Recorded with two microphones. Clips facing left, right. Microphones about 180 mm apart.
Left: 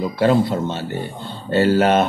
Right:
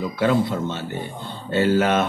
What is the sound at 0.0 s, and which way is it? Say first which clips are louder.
A man's voice: left 4 dB; 35° left (ahead or behind).